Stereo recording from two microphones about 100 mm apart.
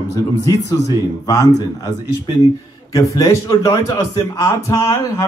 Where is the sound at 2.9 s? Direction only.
35° left (ahead or behind).